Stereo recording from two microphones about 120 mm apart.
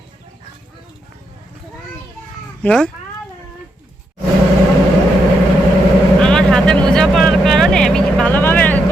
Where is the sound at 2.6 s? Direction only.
5° left (ahead or behind).